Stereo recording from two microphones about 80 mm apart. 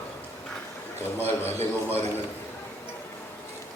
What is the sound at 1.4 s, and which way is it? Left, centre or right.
Speech, left.